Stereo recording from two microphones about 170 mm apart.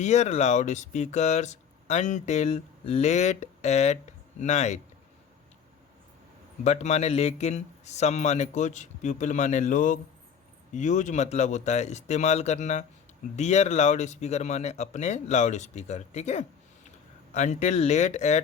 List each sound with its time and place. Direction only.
0.0 s speech: 40° left (ahead or behind)
6.7 s speech: 40° left (ahead or behind)